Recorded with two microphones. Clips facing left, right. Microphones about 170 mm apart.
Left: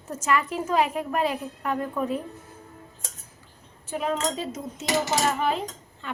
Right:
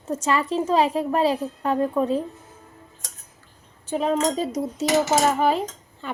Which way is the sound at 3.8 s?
30° right (ahead or behind).